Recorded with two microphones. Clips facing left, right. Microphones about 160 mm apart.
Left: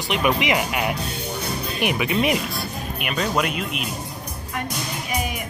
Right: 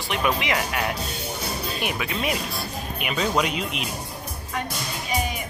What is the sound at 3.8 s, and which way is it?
Speech, 50° left (ahead or behind).